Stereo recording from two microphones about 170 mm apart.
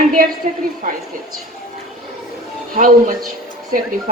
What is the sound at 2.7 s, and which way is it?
Speech, 55° right (ahead or behind).